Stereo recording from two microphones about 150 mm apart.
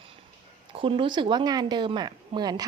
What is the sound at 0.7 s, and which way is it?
Speech, 35° right (ahead or behind).